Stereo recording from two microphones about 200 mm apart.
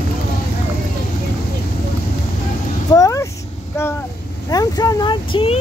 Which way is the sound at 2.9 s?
15° left (ahead or behind).